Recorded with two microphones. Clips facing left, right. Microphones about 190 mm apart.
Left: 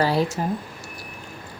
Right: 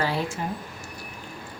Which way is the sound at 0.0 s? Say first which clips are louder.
Left 6 dB; 35° left (ahead or behind).